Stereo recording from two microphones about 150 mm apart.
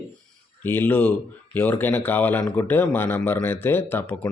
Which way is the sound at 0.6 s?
15° left (ahead or behind).